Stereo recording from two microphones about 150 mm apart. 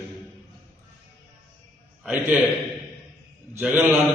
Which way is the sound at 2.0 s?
10° right (ahead or behind).